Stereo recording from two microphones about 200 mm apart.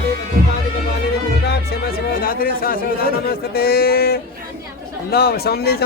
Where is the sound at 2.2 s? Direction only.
45° left (ahead or behind).